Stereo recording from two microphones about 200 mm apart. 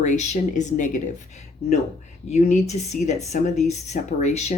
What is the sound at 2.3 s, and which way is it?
Speech, 35° left (ahead or behind).